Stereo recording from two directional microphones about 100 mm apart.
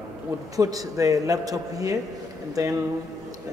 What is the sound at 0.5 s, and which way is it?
A man's voice, 35° right (ahead or behind).